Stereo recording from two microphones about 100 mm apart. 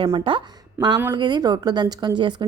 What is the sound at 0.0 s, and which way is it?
Speech, 60° right (ahead or behind).